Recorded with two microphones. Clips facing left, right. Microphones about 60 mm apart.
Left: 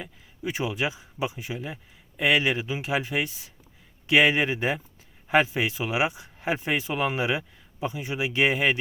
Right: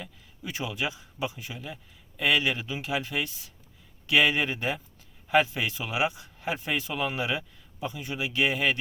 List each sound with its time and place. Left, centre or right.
0.0 s speech: left